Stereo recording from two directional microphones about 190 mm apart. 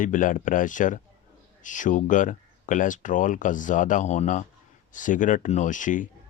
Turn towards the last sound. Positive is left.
turn(degrees=40)  # may be behind; listen again after turning